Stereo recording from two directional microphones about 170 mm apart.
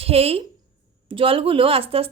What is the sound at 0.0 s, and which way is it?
A woman's voice, 35° right (ahead or behind).